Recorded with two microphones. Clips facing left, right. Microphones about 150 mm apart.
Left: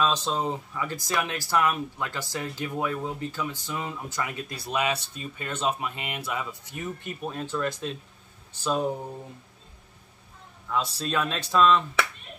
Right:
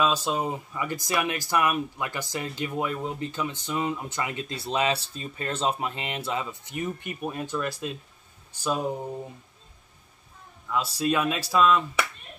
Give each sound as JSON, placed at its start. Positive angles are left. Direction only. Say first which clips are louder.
{"t": 0.0, "sound": "speech", "louder": "right 1 dB", "side_deg": -10}
{"t": 10.7, "sound": "speech", "louder": "right 3 dB", "side_deg": -10}